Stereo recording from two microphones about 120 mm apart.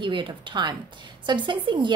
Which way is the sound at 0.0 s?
40° right (ahead or behind).